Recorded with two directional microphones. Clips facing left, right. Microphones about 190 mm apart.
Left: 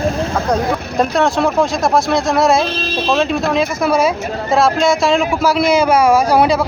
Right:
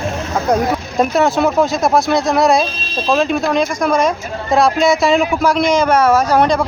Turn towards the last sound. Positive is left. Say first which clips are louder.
# left 1 dB
turn(degrees=5)  # may be behind; listen again after turning